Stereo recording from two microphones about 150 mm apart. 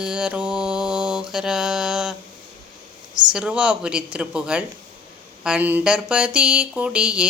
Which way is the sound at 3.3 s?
5° right (ahead or behind).